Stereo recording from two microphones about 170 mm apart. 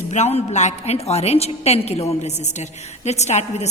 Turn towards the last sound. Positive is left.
turn(degrees=40)  # may be behind; listen again after turning